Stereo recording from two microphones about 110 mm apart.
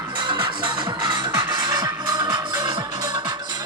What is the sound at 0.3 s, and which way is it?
Music, 45° right (ahead or behind).